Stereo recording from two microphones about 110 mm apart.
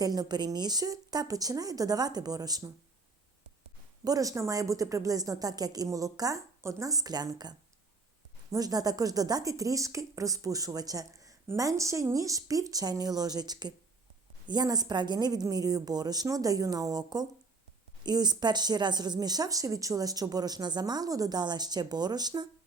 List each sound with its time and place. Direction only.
0.0 s speech: 35° right (ahead or behind)
4.0 s speech: 30° right (ahead or behind)